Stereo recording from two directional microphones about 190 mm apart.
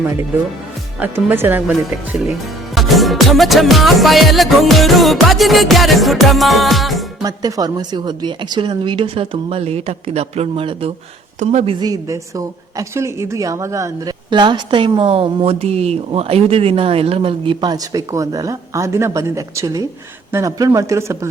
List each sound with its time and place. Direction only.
0.9 s speech: 10° right (ahead or behind)
2.7 s music: centre (ahead or behind)
7.2 s a woman's voice: 20° right (ahead or behind)